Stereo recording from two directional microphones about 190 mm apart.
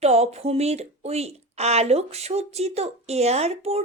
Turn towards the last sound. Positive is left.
turn(degrees=-35)  # may be behind; listen again after turning